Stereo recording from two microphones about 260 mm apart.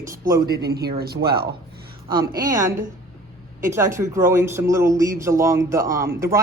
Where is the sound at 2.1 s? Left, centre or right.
Centre.